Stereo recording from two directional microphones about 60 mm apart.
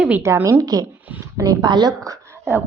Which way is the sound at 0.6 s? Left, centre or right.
Right.